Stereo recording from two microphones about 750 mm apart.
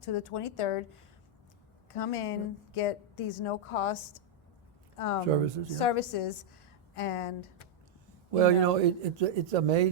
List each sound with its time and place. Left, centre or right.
0.0 s a woman's voice: left
8.4 s a man's voice: right